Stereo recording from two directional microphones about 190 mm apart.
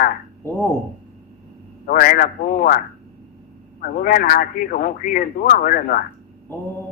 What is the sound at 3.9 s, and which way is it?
Speech, 45° left (ahead or behind).